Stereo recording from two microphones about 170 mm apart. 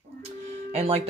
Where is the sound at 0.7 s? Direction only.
35° right (ahead or behind).